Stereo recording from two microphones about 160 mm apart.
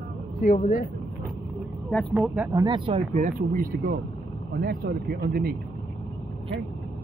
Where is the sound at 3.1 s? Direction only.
55° right (ahead or behind); by 5.5 s 70° right (ahead or behind).